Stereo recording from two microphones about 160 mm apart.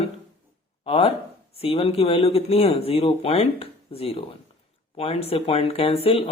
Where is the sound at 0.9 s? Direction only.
35° left (ahead or behind).